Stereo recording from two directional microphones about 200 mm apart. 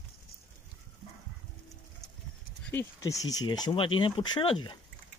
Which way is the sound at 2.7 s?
15° left (ahead or behind).